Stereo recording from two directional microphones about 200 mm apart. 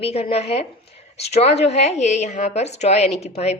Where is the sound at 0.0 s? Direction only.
30° left (ahead or behind).